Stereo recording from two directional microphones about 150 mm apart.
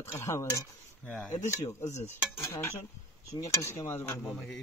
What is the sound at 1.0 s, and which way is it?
Speech, 5° left (ahead or behind).